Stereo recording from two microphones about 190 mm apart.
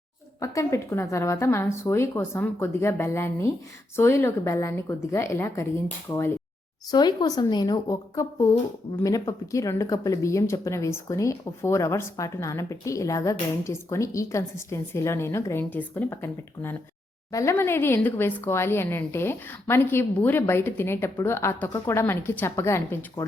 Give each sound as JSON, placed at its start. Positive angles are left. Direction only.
{"t": 0.3, "sound": "speech", "side_deg": 15}
{"t": 6.9, "sound": "a woman's voice", "side_deg": 20}